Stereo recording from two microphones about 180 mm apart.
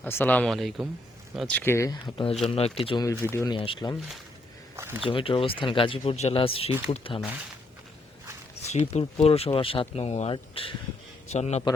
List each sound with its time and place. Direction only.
0.0 s speech: 10° left (ahead or behind); by 3.9 s 30° left (ahead or behind)
4.8 s speech: 15° right (ahead or behind)
5.0 s speech: 30° left (ahead or behind)
8.9 s speech: 35° left (ahead or behind)